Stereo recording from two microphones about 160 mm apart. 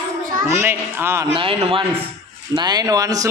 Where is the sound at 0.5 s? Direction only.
15° right (ahead or behind).